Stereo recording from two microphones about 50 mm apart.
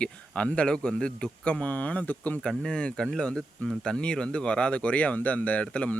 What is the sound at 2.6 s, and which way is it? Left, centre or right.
Speech, centre.